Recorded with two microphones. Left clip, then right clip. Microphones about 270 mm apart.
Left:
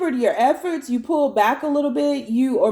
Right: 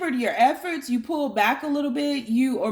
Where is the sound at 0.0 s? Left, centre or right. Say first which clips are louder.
Left 3 dB; right.